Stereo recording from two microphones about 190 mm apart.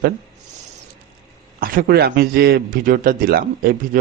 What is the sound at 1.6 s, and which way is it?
A man's voice, 55° right (ahead or behind).